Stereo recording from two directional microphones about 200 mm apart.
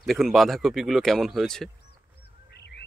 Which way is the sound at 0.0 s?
Centre (ahead or behind).